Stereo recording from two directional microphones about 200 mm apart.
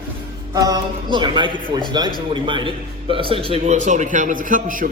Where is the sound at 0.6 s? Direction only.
20° right (ahead or behind).